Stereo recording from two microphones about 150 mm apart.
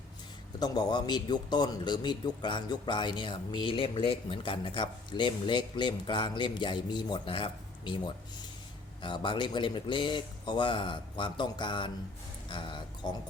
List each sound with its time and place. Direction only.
0.6 s a man's voice: 25° left (ahead or behind)